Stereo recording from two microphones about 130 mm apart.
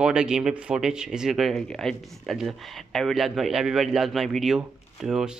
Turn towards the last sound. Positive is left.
turn(degrees=-5)  # may be behind; listen again after turning